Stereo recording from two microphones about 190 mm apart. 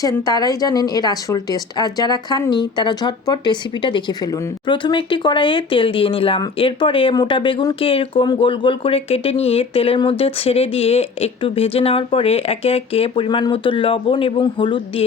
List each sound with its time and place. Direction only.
0.0 s speech: 20° left (ahead or behind)